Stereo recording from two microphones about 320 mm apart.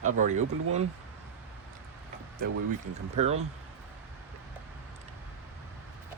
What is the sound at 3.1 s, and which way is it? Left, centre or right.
Speech, centre.